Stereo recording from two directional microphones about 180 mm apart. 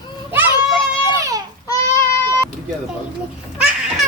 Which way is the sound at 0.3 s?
10° right (ahead or behind).